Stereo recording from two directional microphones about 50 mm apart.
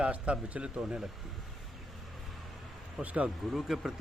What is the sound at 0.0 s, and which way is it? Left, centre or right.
Speech, right.